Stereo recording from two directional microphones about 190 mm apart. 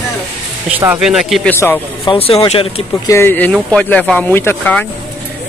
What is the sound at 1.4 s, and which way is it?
Speech, 10° left (ahead or behind).